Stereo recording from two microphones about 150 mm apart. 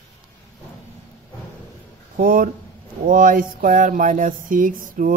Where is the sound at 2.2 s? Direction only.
70° right (ahead or behind).